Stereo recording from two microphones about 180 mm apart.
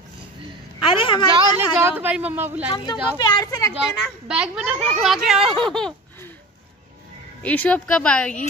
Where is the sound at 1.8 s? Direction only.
10° right (ahead or behind).